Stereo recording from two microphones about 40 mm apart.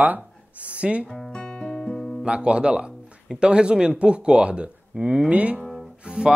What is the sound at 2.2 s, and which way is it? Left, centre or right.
Speech, right.